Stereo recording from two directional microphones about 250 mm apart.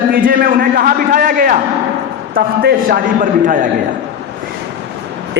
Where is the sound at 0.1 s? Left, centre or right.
Right.